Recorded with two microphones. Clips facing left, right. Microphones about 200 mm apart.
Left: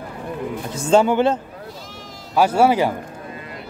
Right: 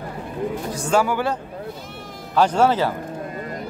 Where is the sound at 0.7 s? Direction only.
25° left (ahead or behind).